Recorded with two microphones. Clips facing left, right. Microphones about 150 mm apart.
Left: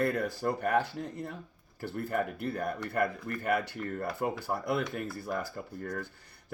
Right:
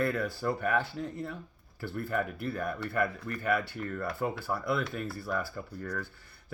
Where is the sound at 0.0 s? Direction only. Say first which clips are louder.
Left 1 dB; 50° left (ahead or behind).